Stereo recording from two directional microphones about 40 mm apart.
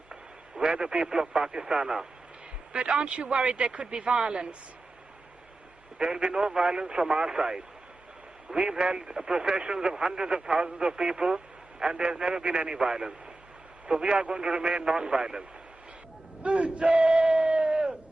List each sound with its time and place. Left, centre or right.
0.1 s a sound: centre
1.2 s speech: centre
6.1 s speech: right
16.4 s battle cry: right